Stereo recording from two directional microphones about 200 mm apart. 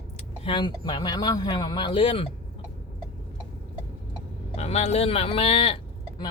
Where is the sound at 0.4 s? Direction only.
25° left (ahead or behind).